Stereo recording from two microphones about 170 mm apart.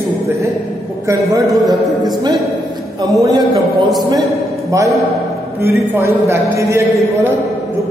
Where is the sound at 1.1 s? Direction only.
15° right (ahead or behind).